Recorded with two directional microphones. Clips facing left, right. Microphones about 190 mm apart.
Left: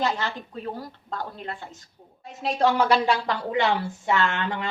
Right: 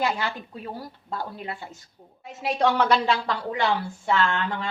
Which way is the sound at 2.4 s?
5° left (ahead or behind).